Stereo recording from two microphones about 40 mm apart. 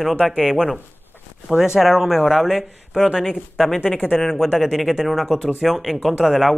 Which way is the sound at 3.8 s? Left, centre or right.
Left.